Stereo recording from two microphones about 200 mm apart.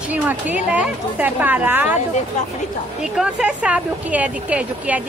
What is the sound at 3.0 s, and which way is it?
Speech, 5° right (ahead or behind).